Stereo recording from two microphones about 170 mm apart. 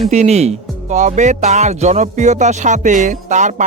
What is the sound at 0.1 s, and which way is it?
Speech, 40° right (ahead or behind).